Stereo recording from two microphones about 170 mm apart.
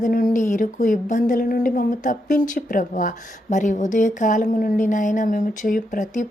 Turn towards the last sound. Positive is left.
turn(degrees=50)  # may be behind; listen again after turning